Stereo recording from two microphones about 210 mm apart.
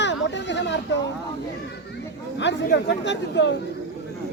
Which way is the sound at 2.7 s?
55° left (ahead or behind).